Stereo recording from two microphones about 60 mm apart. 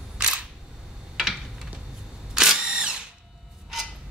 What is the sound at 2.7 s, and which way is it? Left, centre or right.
Drill, centre.